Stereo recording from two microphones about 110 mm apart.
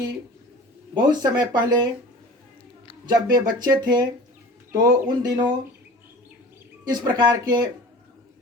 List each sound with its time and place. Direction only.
0.9 s speech: 40° right (ahead or behind)
3.1 s speech: 40° right (ahead or behind)
6.9 s speech: 40° right (ahead or behind)